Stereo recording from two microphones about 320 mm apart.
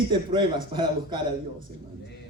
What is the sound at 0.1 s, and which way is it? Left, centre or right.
Speech, centre.